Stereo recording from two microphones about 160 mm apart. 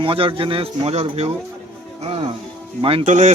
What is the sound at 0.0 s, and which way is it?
Speech, 35° right (ahead or behind).